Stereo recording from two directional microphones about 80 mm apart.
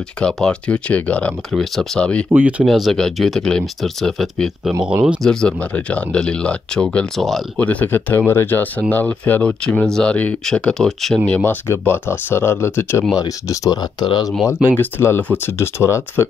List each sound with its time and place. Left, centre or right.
0.2 s speech: centre
1.5 s speech: centre
2.0 s speech: centre
2.3 s speech: centre
2.7 s speech: centre
7.2 s speech: centre
7.5 s speech: centre
11.4 s speech: left
13.5 s speech: left
14.8 s speech: left